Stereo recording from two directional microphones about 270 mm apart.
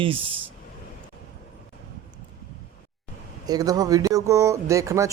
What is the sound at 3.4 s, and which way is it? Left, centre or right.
Speech, centre.